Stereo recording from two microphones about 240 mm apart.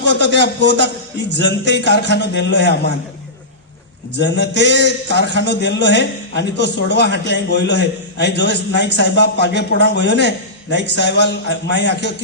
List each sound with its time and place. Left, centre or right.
0.0 s a man's voice: left
4.2 s a man's voice: left